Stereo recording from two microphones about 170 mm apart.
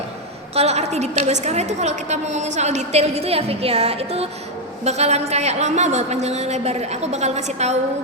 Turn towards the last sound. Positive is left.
turn(degrees=-40)  # may be behind; listen again after turning